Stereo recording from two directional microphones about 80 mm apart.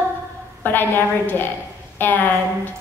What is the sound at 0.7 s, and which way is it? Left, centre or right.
A woman's voice, left.